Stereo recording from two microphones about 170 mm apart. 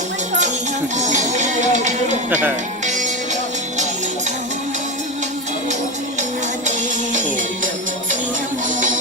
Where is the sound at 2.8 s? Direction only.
45° right (ahead or behind).